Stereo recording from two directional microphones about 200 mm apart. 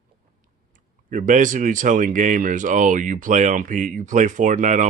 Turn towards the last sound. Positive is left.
turn(degrees=-40)  # may be behind; listen again after turning